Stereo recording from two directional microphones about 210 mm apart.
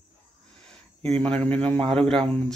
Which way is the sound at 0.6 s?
5° left (ahead or behind).